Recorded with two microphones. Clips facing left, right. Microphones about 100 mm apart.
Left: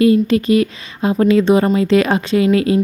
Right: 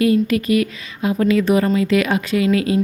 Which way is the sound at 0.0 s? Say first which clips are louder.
Left 4 dB; 30° left (ahead or behind).